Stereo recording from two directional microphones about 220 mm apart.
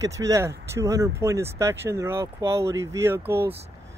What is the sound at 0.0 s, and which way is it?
Speech, 15° right (ahead or behind).